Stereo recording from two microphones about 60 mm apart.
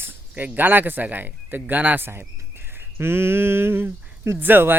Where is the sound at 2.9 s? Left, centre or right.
Right.